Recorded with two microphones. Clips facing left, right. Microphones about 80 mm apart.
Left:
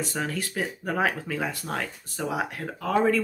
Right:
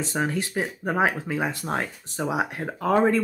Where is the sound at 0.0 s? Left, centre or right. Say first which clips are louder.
Right 4 dB; right.